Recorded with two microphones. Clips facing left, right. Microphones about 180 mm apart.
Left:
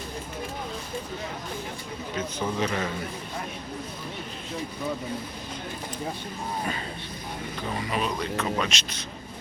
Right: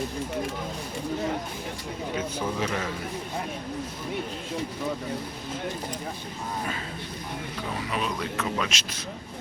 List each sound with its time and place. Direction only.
2.1 s speech: 5° right (ahead or behind)
7.8 s speech: centre (ahead or behind)